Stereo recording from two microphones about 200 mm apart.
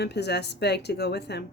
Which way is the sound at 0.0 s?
55° left (ahead or behind).